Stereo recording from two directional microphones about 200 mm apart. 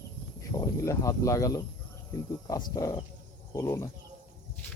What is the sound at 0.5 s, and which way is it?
Speech, 15° left (ahead or behind).